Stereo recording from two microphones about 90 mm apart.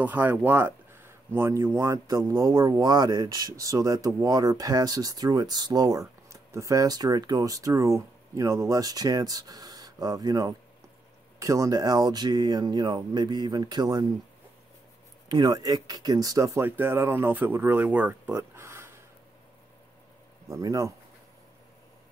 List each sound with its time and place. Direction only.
0.0 s speech: 20° right (ahead or behind)
2.0 s a man's voice: 45° right (ahead or behind)
2.9 s speech: 50° right (ahead or behind)
15.2 s speech: 55° right (ahead or behind); by 16.6 s 40° right (ahead or behind)
16.6 s speech: 25° right (ahead or behind)
18.3 s a sound: 30° right (ahead or behind)
20.4 s a man's voice: 35° right (ahead or behind)